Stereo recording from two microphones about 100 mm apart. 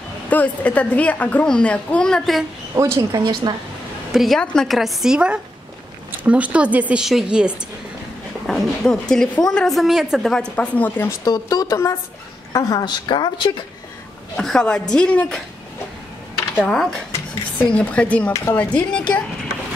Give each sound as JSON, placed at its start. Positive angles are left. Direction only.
{"t": 0.3, "sound": "a child's voice", "side_deg": 15}
{"t": 2.7, "sound": "speech", "side_deg": -30}
{"t": 4.1, "sound": "a woman's voice", "side_deg": 0}
{"t": 8.5, "sound": "a child's voice", "side_deg": 5}
{"t": 11.2, "sound": "speech", "side_deg": 40}
{"t": 14.3, "sound": "a child's voice", "side_deg": 10}
{"t": 16.5, "sound": "a child's voice", "side_deg": 10}